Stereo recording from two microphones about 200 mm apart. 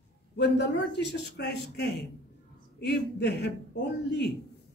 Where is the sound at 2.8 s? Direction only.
60° left (ahead or behind).